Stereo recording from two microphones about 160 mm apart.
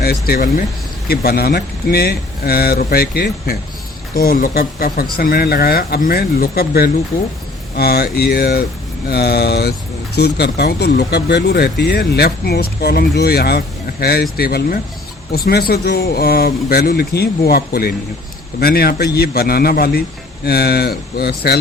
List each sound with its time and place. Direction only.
0.0 s a man's voice: 70° left (ahead or behind)
1.0 s a man's voice: 75° left (ahead or behind)
9.0 s a man's voice: 85° left